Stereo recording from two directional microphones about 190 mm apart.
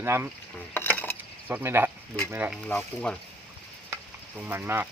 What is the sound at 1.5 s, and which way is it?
Speech, 15° right (ahead or behind).